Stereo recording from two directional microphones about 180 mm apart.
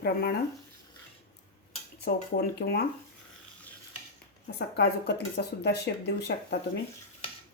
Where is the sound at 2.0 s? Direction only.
60° left (ahead or behind).